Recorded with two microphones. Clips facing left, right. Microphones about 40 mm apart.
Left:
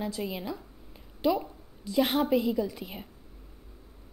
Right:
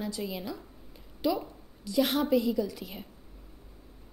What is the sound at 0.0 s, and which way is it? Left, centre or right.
A woman's voice, centre.